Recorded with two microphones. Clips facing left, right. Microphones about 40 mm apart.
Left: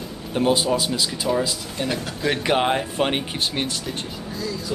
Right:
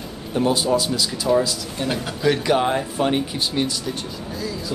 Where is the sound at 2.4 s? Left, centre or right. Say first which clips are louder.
Right 1 dB; left.